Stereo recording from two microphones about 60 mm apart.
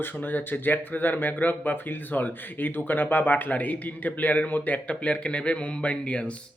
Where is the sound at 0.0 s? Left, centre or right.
Left.